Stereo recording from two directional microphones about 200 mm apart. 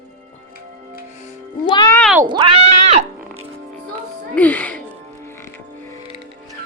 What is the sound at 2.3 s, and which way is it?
Speech, 20° right (ahead or behind).